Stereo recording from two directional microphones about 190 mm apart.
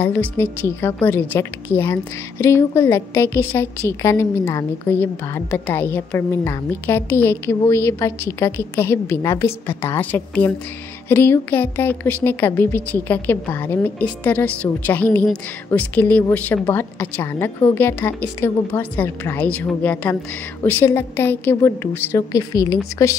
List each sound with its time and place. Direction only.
0.0 s a woman's voice: 10° left (ahead or behind)